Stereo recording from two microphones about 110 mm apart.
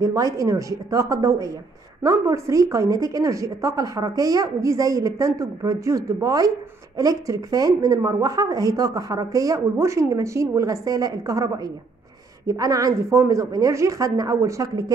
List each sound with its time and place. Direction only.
0.0 s speech: 30° right (ahead or behind)